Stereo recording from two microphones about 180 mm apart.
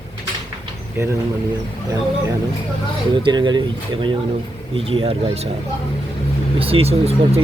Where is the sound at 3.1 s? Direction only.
25° right (ahead or behind).